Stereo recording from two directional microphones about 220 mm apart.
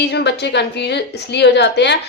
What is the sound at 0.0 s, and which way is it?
Speech, 50° left (ahead or behind).